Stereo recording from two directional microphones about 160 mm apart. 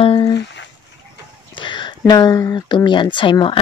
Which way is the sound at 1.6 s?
30° left (ahead or behind).